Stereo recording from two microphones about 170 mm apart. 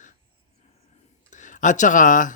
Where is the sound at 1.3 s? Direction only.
45° left (ahead or behind).